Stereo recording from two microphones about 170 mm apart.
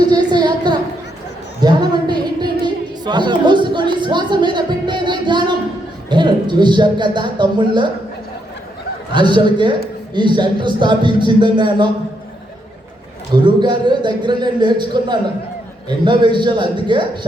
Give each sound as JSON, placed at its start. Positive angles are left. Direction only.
{"t": 0.0, "sound": "a sound", "side_deg": -25}
{"t": 4.0, "sound": "music", "side_deg": -25}
{"t": 6.1, "sound": "speech", "side_deg": -25}
{"t": 9.1, "sound": "a man's voice", "side_deg": -25}
{"t": 13.3, "sound": "a man's voice", "side_deg": -25}